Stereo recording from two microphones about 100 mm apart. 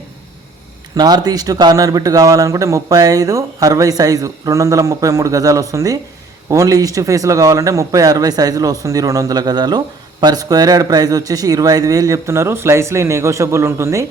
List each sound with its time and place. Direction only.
0.9 s a man's voice: 40° right (ahead or behind)